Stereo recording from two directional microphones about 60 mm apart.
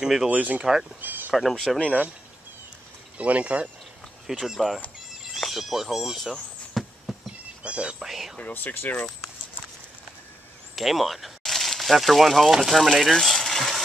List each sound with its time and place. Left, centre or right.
0.0 s speech: centre
0.3 s speech: right
1.0 s a sound: right
1.3 s speech: centre
3.2 s speech: right
4.3 s speech: centre
6.7 s a sound: centre
7.6 s speech: centre
8.0 s speech: centre
8.4 s speech: left
10.8 s speech: centre